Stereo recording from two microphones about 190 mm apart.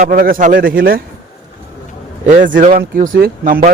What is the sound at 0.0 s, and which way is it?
A man's voice, 50° right (ahead or behind).